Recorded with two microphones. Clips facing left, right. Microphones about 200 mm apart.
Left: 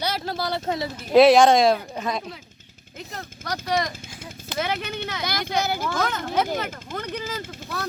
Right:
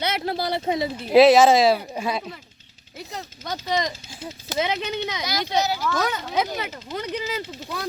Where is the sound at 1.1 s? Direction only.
Centre (ahead or behind).